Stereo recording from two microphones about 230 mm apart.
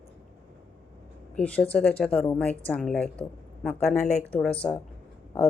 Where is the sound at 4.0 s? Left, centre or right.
Left.